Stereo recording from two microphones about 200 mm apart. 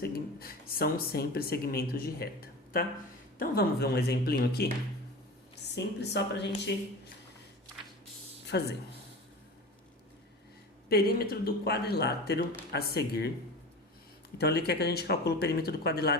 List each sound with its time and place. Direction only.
0.0 s a woman's voice: 50° left (ahead or behind)
8.4 s speech: 55° left (ahead or behind)
10.8 s speech: 50° left (ahead or behind)
14.3 s speech: 55° left (ahead or behind)